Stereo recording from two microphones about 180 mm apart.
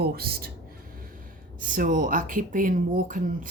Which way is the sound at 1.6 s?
50° right (ahead or behind).